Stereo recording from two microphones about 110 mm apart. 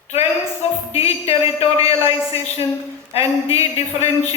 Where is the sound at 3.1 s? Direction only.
65° left (ahead or behind).